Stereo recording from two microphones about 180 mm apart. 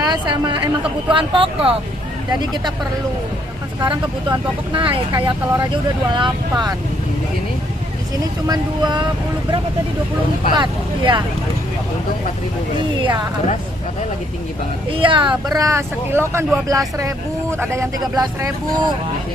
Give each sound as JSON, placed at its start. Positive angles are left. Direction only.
{"t": 0.0, "sound": "speech", "side_deg": -25}
{"t": 3.8, "sound": "speech", "side_deg": -25}
{"t": 8.5, "sound": "speech", "side_deg": -25}
{"t": 10.6, "sound": "speech", "side_deg": -25}
{"t": 12.7, "sound": "speech", "side_deg": -25}
{"t": 14.9, "sound": "speech", "side_deg": -30}